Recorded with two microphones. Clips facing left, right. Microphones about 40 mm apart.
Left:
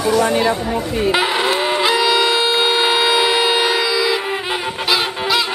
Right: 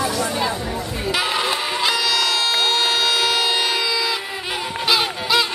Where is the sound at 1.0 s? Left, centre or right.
Left.